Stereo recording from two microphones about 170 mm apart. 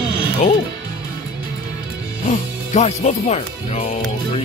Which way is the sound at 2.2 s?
45° left (ahead or behind).